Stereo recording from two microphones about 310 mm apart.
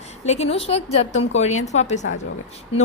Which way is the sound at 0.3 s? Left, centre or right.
Left.